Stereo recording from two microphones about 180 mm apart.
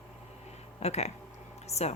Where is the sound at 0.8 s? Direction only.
35° left (ahead or behind).